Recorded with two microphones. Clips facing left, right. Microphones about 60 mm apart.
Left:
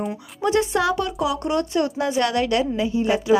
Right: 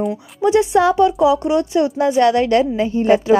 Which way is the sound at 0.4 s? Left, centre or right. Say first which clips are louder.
Right 6 dB; right.